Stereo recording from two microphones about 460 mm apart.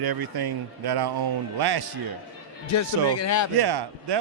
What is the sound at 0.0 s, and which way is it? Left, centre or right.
Speech, right.